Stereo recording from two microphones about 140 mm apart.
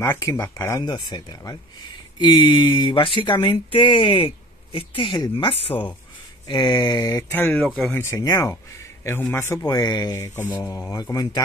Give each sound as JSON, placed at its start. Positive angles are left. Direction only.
{"t": 0.0, "sound": "speech", "side_deg": 20}
{"t": 0.8, "sound": "speech", "side_deg": 35}
{"t": 7.3, "sound": "mantra", "side_deg": 15}
{"t": 7.6, "sound": "speech", "side_deg": 0}
{"t": 7.9, "sound": "speech", "side_deg": 20}
{"t": 10.1, "sound": "mantra", "side_deg": 15}
{"t": 10.5, "sound": "speech", "side_deg": 25}